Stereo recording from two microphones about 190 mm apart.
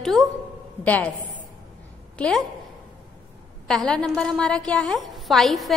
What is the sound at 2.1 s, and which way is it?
Speech, 5° left (ahead or behind).